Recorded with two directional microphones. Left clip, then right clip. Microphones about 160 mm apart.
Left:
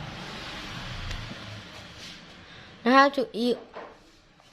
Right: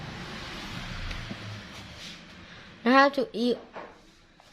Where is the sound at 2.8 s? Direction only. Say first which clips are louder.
Left 1 dB; 5° left (ahead or behind).